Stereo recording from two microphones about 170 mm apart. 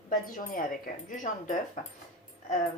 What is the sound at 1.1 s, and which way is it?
Speech, 50° left (ahead or behind).